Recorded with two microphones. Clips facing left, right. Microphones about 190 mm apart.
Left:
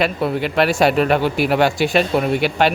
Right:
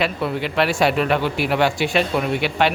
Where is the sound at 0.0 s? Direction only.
45° left (ahead or behind).